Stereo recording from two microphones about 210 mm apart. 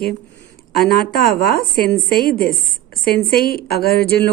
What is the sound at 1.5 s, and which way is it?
Speech, 45° left (ahead or behind).